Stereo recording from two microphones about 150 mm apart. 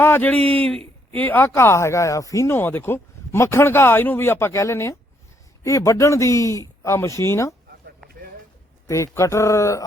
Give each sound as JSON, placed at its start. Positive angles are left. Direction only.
{"t": 0.0, "sound": "a man's voice", "side_deg": 15}
{"t": 8.9, "sound": "speech", "side_deg": 20}